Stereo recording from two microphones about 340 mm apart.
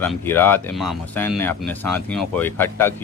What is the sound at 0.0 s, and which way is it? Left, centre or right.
Speech, centre.